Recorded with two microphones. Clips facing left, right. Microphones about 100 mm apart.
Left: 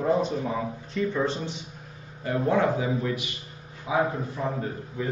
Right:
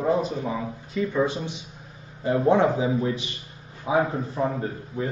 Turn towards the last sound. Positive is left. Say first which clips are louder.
# right 2 dB
turn(degrees=-30)  # may be behind; listen again after turning